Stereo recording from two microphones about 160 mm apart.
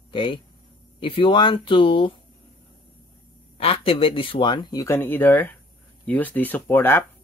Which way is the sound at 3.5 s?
35° left (ahead or behind).